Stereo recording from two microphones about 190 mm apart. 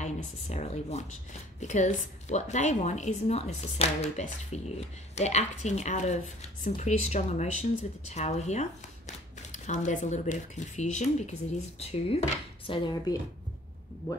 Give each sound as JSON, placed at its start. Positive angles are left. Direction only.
{"t": 0.0, "sound": "a woman's voice", "side_deg": 35}